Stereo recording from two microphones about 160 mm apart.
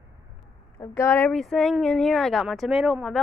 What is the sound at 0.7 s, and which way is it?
Speech, 15° left (ahead or behind).